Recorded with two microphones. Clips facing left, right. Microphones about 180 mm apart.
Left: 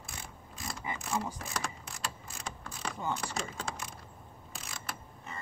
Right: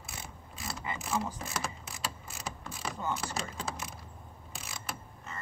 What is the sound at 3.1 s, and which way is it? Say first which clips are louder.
Speech: even; centre (ahead or behind).